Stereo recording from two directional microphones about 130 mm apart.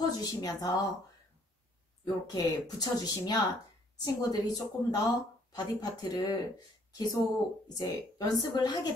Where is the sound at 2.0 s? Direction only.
30° left (ahead or behind).